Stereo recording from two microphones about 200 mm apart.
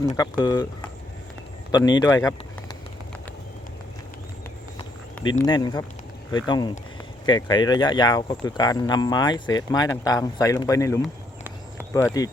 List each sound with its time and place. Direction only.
0.2 s speech: 20° left (ahead or behind)
1.7 s speech: 20° left (ahead or behind)
5.5 s speech: 20° left (ahead or behind)